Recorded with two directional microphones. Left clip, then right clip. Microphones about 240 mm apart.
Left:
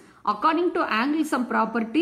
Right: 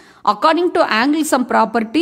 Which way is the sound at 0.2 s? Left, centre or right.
Right.